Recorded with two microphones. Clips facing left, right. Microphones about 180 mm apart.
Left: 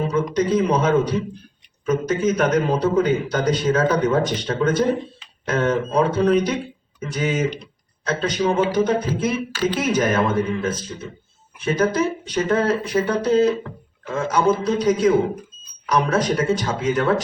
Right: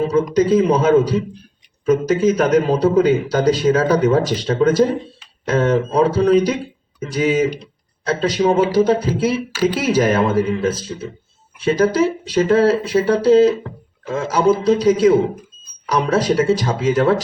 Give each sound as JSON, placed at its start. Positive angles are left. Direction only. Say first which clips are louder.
{"t": 0.3, "sound": "speech", "louder": "right 5 dB", "side_deg": -30}
{"t": 7.6, "sound": "guitar", "louder": "right 4 dB", "side_deg": -30}
{"t": 8.4, "sound": "speech", "louder": "right 4 dB", "side_deg": -30}